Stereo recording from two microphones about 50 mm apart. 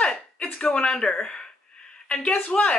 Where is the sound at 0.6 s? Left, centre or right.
Centre.